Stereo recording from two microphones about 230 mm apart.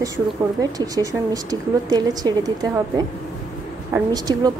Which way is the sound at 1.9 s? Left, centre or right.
Centre.